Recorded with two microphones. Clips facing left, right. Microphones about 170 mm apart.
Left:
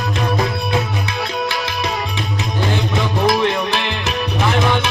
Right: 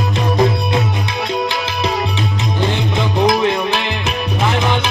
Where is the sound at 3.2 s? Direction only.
20° right (ahead or behind).